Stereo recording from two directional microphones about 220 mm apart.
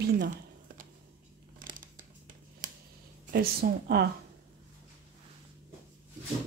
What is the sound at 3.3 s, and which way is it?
Speech, 45° right (ahead or behind).